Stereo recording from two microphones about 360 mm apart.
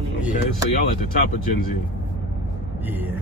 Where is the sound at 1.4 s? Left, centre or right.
Left.